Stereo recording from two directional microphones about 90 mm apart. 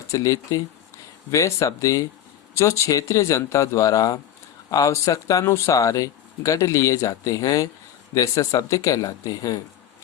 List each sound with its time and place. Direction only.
0.1 s speech: 40° left (ahead or behind)